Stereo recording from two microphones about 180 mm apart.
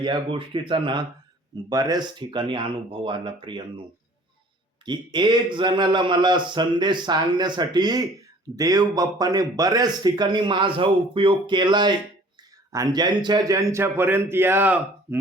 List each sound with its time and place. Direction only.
0.0 s a man's voice: 25° right (ahead or behind)
4.9 s a man's voice: 25° right (ahead or behind)